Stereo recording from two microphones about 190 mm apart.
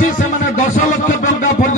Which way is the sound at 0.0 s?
45° left (ahead or behind).